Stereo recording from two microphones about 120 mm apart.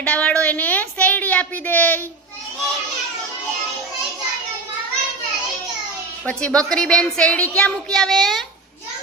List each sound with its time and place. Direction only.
0.0 s a woman's voice: 10° left (ahead or behind)
6.2 s a woman's voice: 10° left (ahead or behind)